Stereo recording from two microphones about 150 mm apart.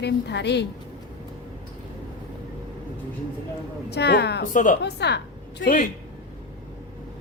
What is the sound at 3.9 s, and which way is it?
A man's voice, 90° left.